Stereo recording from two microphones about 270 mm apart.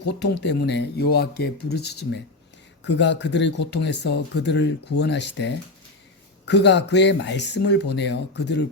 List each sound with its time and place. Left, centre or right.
0.2 s speech: left